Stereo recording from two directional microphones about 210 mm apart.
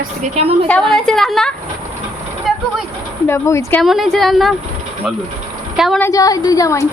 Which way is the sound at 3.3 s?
10° left (ahead or behind).